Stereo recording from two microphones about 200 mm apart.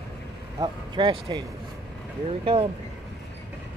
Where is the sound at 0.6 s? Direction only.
20° right (ahead or behind).